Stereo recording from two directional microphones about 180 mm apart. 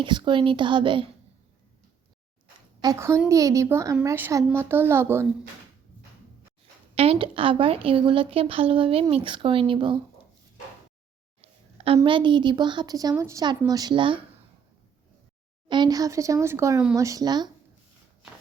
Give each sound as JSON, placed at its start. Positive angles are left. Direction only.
{"t": 0.0, "sound": "a woman's voice", "side_deg": -25}
{"t": 2.8, "sound": "speech", "side_deg": -15}
{"t": 6.9, "sound": "speech", "side_deg": -35}
{"t": 11.3, "sound": "a sound", "side_deg": -35}
{"t": 12.0, "sound": "a woman's voice", "side_deg": -25}
{"t": 15.7, "sound": "a woman's voice", "side_deg": -20}